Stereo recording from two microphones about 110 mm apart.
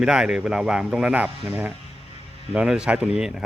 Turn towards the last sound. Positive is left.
turn(degrees=-5)  # may be behind; listen again after turning